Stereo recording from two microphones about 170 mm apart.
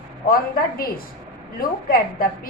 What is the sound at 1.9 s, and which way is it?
Speech, 60° left (ahead or behind).